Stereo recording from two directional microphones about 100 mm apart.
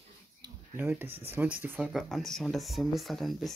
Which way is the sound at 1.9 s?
Centre (ahead or behind).